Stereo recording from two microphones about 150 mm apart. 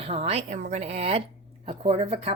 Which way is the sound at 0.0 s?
40° right (ahead or behind).